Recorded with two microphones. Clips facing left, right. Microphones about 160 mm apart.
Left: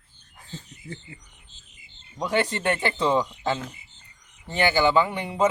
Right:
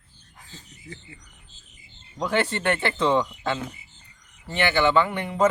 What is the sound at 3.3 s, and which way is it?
Speech, 30° left (ahead or behind).